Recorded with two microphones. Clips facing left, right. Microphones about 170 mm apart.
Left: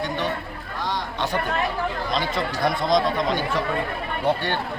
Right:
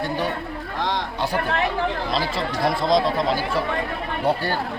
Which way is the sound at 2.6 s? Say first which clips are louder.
Right 2 dB; centre (ahead or behind).